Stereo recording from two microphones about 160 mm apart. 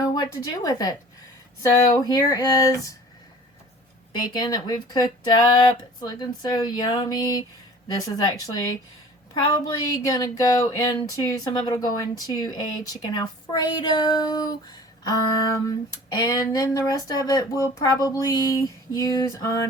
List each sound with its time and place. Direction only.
0.0 s a woman's voice: 20° left (ahead or behind)
4.3 s speech: 25° left (ahead or behind)